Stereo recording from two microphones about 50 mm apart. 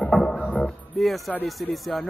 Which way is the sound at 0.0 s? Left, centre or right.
Centre.